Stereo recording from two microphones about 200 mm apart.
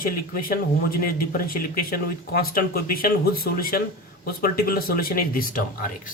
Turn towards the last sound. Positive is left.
turn(degrees=45)  # may be behind; listen again after turning